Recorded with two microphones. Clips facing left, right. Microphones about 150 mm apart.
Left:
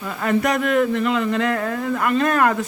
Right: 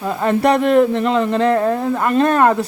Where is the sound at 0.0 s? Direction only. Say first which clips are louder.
Right 5 dB; 30° right (ahead or behind).